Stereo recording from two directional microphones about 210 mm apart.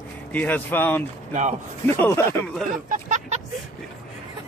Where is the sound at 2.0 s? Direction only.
15° left (ahead or behind).